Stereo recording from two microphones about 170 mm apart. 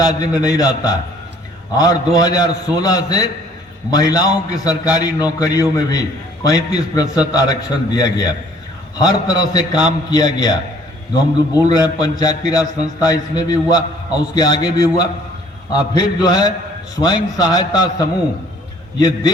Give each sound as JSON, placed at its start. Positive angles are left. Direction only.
{"t": 0.2, "sound": "a man's voice", "side_deg": 20}